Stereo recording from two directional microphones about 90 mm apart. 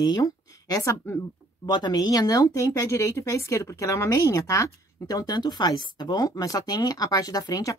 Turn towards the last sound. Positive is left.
turn(degrees=45)  # may be behind; listen again after turning